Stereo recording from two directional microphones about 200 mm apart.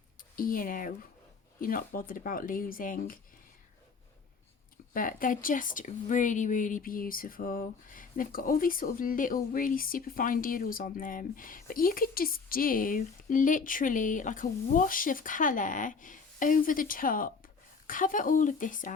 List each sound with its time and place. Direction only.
0.2 s speech: 45° left (ahead or behind)
4.9 s speech: 45° left (ahead or behind)